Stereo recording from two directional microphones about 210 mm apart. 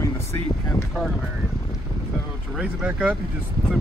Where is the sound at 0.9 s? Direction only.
Centre (ahead or behind).